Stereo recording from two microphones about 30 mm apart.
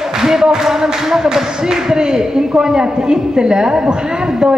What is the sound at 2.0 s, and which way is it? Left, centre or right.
A man's voice, right.